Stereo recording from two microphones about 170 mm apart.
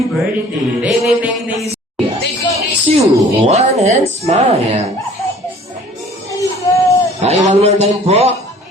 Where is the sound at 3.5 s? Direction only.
40° right (ahead or behind).